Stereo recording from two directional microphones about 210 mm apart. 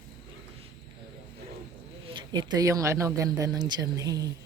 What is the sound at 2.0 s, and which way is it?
Speech, 20° right (ahead or behind).